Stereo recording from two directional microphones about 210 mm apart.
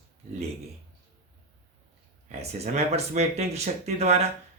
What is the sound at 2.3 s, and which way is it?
Speech, 30° right (ahead or behind).